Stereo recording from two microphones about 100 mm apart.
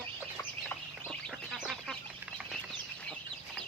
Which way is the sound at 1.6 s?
Centre (ahead or behind).